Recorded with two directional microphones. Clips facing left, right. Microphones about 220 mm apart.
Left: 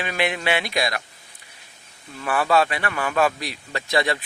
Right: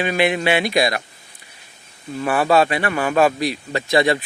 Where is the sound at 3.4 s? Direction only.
Centre (ahead or behind).